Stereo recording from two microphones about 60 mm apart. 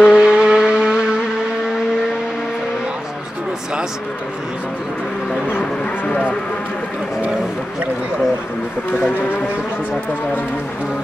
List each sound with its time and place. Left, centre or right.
0.0 s vehicle: centre
5.5 s dog: centre